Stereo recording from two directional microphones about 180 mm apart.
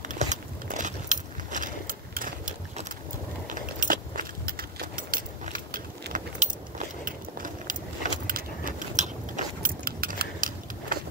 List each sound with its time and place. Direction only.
0.1 s keys jangling: 45° right (ahead or behind)